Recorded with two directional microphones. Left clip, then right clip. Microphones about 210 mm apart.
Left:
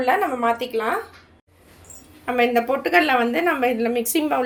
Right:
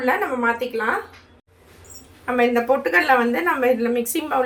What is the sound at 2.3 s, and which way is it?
A woman's voice, 35° left (ahead or behind).